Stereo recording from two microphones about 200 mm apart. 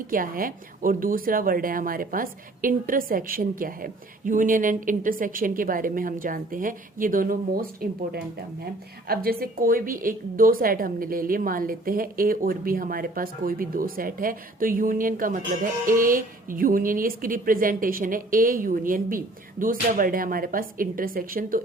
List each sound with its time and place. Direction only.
0.1 s a woman's voice: 45° right (ahead or behind)